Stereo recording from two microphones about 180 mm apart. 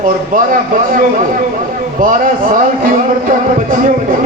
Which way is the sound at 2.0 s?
50° right (ahead or behind).